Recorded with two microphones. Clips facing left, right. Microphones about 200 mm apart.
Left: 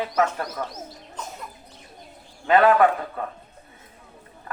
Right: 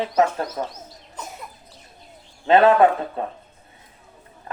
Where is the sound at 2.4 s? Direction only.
25° right (ahead or behind).